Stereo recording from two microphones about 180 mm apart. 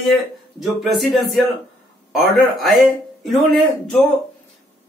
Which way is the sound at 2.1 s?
Centre (ahead or behind).